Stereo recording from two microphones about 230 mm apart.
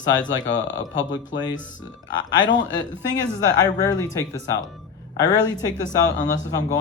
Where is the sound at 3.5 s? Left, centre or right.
Centre.